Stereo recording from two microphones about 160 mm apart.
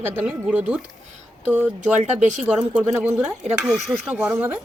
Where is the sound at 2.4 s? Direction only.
10° right (ahead or behind).